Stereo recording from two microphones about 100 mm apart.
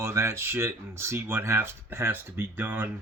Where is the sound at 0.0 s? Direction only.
25° right (ahead or behind).